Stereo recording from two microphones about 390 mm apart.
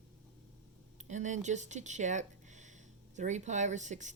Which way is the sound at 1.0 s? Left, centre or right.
Centre.